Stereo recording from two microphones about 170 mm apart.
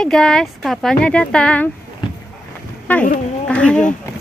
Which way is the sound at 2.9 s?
10° left (ahead or behind).